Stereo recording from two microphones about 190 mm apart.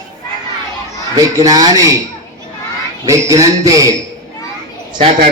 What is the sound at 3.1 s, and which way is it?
Speech, 15° right (ahead or behind).